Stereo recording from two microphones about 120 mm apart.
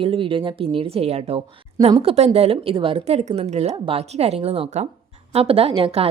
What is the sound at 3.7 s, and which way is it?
A woman's voice, 50° right (ahead or behind).